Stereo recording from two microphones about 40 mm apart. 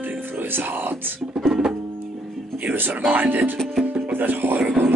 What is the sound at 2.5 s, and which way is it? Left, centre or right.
Speech, right.